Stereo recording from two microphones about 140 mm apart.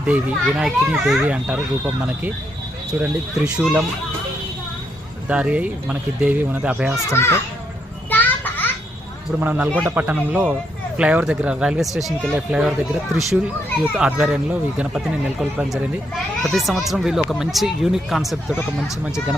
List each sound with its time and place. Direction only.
0.0 s speech: 5° right (ahead or behind)
3.0 s speech: 5° right (ahead or behind)
5.3 s a man's voice: 10° right (ahead or behind)
7.1 s a child's voice: 20° left (ahead or behind)
8.1 s children playing: 10° left (ahead or behind)
9.4 s a man's voice: 10° right (ahead or behind)
13.9 s speech: 5° right (ahead or behind)